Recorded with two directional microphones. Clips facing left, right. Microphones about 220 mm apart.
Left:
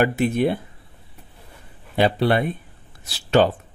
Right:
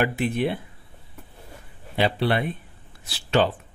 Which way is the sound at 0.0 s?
45° left (ahead or behind).